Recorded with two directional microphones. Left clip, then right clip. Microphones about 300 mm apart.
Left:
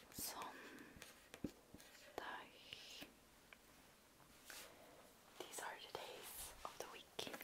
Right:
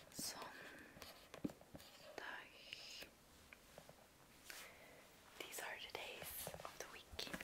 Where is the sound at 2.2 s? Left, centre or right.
Left.